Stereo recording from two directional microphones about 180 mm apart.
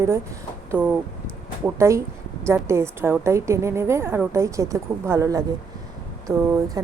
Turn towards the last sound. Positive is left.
turn(degrees=-20)  # may be behind; listen again after turning